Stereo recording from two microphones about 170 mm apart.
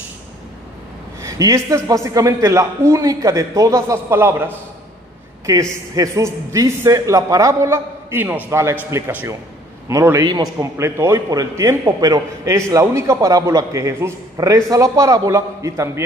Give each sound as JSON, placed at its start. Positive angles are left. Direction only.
{"t": 1.2, "sound": "a man's voice", "side_deg": -20}
{"t": 5.5, "sound": "a man's voice", "side_deg": -20}